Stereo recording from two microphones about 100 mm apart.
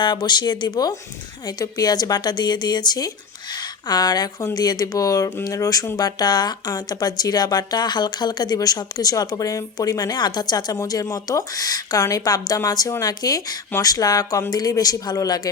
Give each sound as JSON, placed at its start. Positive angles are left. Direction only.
{"t": 0.0, "sound": "speech", "side_deg": 45}